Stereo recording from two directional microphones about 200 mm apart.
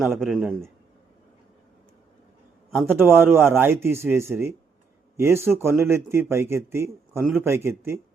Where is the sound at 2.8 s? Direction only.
10° right (ahead or behind).